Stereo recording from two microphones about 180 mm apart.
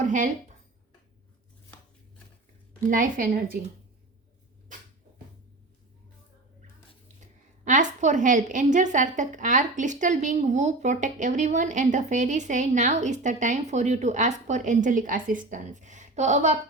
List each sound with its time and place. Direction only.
0.0 s a sound: 45° right (ahead or behind)
2.9 s a woman's voice: 50° right (ahead or behind)
7.6 s a woman's voice: 45° right (ahead or behind)